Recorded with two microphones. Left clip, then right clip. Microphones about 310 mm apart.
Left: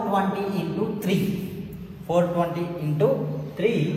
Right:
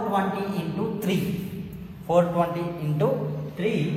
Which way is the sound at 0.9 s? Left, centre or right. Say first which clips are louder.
Left 2 dB; centre.